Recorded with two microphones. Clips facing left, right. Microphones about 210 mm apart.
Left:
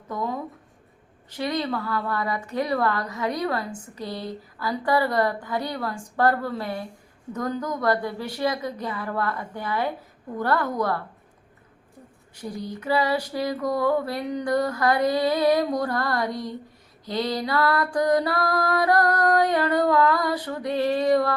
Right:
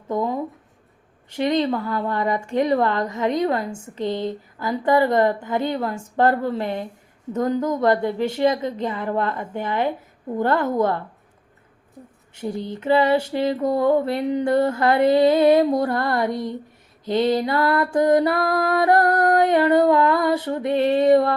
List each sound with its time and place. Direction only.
0.1 s a sound: 25° right (ahead or behind)
1.4 s speech: 25° right (ahead or behind)
12.3 s speech: 25° right (ahead or behind)